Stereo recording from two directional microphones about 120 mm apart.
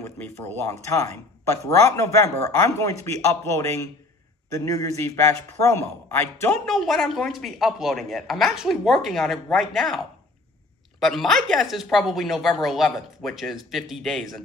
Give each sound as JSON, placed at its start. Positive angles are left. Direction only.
{"t": 0.5, "sound": "a man's voice", "side_deg": 25}
{"t": 6.6, "sound": "speech", "side_deg": 5}